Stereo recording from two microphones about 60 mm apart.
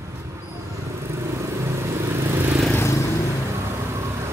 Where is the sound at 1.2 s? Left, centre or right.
Right.